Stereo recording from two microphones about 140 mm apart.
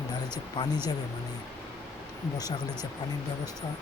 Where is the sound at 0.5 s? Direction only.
30° left (ahead or behind).